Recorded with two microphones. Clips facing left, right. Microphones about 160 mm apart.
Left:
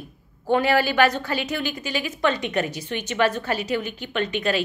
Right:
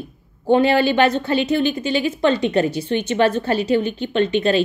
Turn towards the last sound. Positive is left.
turn(degrees=-30)  # may be behind; listen again after turning